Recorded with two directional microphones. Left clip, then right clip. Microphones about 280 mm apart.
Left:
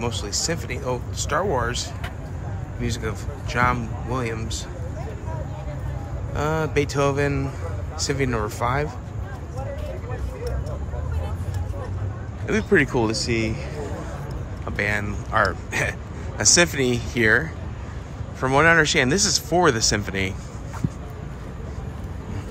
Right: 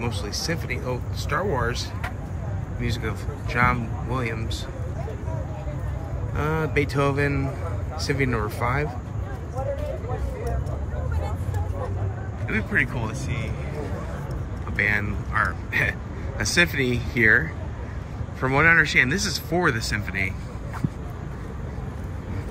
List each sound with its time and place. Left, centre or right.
0.0 s speech: centre
2.8 s speech: centre
6.3 s speech: centre
12.4 s speech: centre
14.8 s speech: centre